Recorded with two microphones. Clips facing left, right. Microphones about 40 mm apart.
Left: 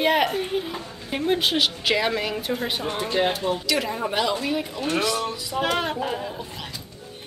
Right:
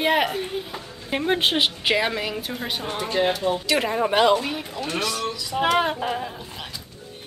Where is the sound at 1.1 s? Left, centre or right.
Centre.